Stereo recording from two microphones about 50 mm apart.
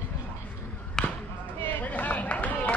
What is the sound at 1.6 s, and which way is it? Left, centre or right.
Run, left.